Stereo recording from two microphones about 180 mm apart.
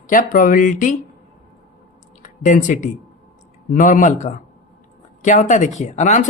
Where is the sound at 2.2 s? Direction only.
45° left (ahead or behind).